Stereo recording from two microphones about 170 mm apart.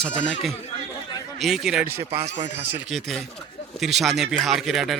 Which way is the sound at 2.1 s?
35° right (ahead or behind).